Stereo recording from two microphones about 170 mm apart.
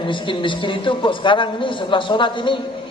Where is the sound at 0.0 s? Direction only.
30° left (ahead or behind).